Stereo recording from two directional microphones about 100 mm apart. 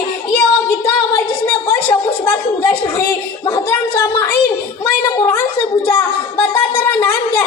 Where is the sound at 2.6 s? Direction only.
30° left (ahead or behind).